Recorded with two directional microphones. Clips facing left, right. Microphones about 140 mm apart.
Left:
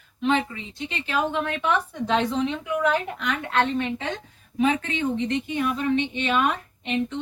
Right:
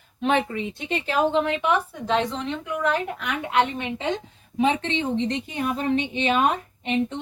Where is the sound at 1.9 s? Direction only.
Centre (ahead or behind).